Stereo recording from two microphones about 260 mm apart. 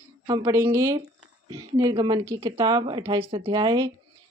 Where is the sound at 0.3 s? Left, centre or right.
Centre.